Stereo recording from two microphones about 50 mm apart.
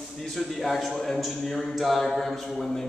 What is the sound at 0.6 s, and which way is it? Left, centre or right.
A man's voice, centre.